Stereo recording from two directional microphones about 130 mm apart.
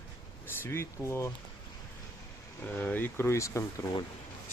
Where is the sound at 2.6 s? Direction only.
15° left (ahead or behind).